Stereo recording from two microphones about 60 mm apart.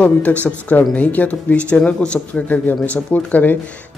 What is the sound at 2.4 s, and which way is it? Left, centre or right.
Speech, left.